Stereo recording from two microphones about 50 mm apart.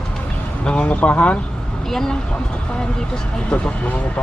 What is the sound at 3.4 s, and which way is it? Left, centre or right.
Speech, left.